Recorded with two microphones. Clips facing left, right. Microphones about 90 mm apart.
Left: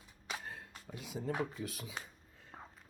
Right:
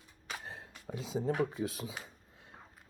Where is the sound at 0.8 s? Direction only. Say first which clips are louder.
Right 6 dB; 25° right (ahead or behind).